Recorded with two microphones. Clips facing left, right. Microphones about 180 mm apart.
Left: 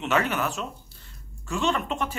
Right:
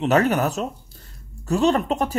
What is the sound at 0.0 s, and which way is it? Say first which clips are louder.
Speech: right 7 dB; 40° right (ahead or behind).